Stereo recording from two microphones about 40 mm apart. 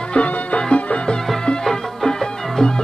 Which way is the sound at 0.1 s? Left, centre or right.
Left.